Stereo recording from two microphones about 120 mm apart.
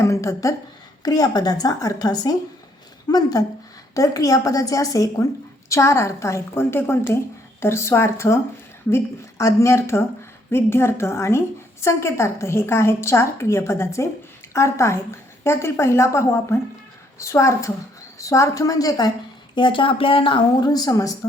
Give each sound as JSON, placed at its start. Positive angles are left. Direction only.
{"t": 0.0, "sound": "a woman's voice", "side_deg": 25}
{"t": 9.4, "sound": "a woman's voice", "side_deg": 25}
{"t": 19.5, "sound": "speech", "side_deg": 45}